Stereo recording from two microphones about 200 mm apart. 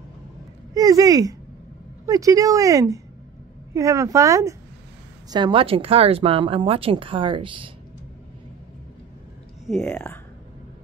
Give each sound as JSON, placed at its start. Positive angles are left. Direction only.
{"t": 0.7, "sound": "speech", "side_deg": -20}
{"t": 9.7, "sound": "speech", "side_deg": 5}